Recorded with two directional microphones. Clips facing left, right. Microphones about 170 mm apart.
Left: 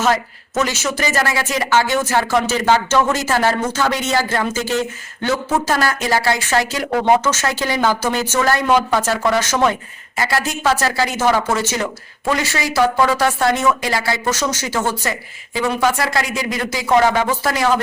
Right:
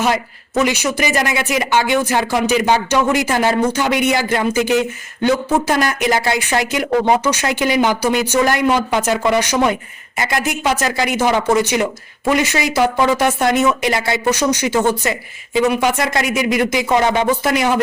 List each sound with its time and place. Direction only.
0.6 s speech: 15° right (ahead or behind)